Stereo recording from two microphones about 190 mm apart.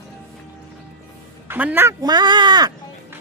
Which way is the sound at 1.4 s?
10° right (ahead or behind).